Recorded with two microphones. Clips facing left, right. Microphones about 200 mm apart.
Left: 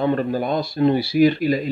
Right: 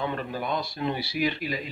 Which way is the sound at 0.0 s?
40° left (ahead or behind).